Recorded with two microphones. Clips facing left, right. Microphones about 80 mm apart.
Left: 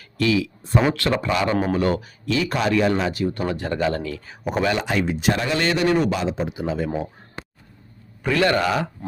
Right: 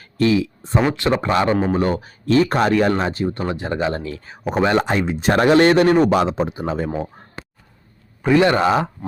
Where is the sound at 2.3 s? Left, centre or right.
Right.